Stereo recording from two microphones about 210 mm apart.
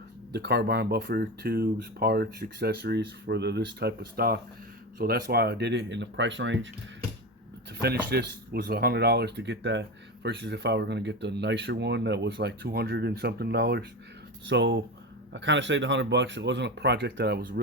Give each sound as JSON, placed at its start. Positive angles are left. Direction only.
{"t": 0.3, "sound": "speech", "side_deg": -50}
{"t": 7.8, "sound": "speech", "side_deg": -50}